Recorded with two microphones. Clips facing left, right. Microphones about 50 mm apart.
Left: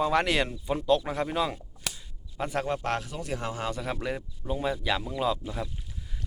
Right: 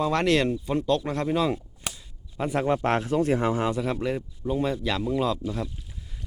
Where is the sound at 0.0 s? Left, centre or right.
Centre.